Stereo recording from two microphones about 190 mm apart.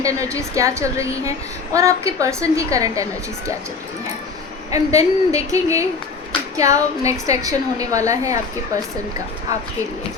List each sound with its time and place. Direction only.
0.0 s a woman's voice: 15° right (ahead or behind)
4.7 s a woman's voice: 15° right (ahead or behind)